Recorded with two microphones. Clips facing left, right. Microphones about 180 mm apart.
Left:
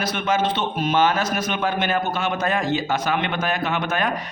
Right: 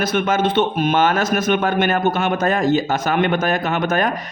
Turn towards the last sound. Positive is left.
turn(degrees=-45)  # may be behind; listen again after turning